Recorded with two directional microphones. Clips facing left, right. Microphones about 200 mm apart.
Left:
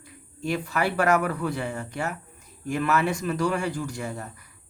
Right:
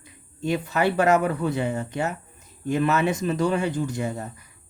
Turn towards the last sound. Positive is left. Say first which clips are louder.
# right 5 dB
turn(degrees=-20)  # may be behind; listen again after turning